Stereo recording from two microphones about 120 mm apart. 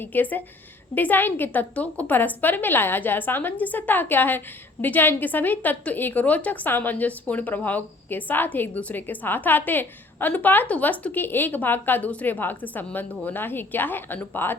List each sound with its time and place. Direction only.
0.0 s a woman's voice: 15° left (ahead or behind)